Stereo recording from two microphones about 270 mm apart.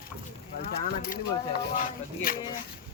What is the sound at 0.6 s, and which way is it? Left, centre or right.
Speech, left.